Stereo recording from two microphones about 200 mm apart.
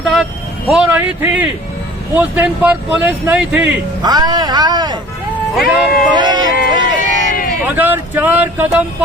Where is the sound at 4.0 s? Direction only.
20° right (ahead or behind).